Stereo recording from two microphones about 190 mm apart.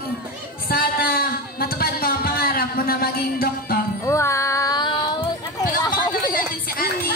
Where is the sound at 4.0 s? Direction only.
15° left (ahead or behind).